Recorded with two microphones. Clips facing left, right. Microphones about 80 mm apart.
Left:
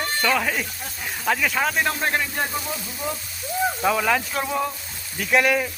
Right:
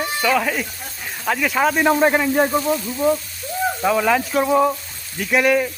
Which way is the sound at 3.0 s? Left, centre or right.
Centre.